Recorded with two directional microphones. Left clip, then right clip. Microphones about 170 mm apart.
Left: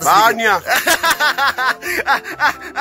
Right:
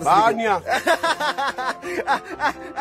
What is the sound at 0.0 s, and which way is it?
Speech, 5° left (ahead or behind).